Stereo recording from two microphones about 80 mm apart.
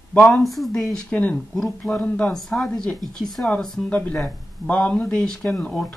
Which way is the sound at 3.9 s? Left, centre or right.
Centre.